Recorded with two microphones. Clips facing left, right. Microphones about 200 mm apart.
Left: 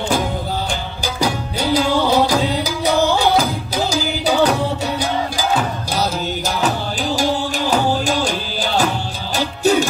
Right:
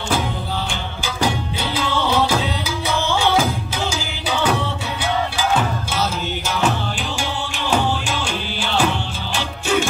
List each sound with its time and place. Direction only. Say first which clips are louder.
1.0 s music: left 1 dB; 40° left (ahead or behind)
7.2 s music: left 7 dB; 40° left (ahead or behind)